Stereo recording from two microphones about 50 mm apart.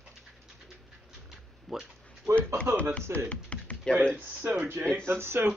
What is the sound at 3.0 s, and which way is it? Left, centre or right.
Speech, right.